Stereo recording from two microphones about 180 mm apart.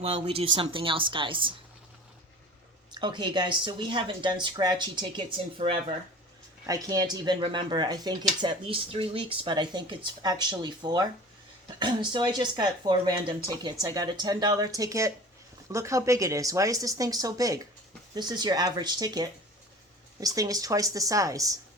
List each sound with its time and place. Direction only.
0.0 s speech: 35° right (ahead or behind)
2.9 s speech: 25° right (ahead or behind)
6.7 s speech: 20° right (ahead or behind)